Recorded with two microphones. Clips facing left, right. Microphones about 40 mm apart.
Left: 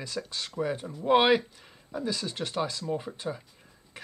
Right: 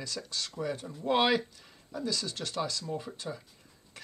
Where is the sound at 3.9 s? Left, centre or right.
Left.